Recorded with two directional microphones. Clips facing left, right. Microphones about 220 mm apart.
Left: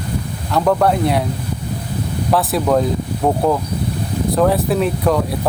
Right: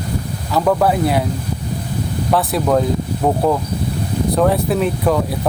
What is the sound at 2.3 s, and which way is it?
Speech, centre (ahead or behind).